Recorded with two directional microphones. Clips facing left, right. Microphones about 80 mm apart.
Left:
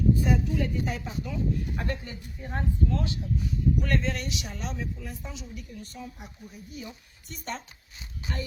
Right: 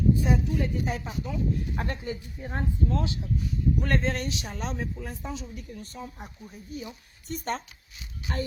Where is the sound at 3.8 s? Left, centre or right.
Right.